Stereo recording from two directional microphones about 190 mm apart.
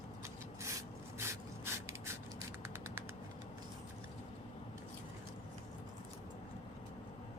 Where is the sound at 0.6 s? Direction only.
15° right (ahead or behind).